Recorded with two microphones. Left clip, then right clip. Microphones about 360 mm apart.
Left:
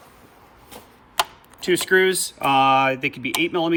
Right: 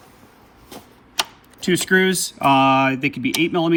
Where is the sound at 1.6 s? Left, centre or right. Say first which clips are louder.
Even; centre.